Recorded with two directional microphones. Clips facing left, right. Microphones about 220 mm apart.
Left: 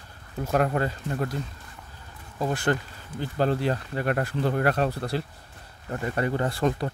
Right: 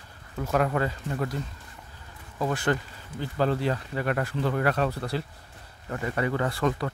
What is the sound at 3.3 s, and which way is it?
Speech, 35° left (ahead or behind).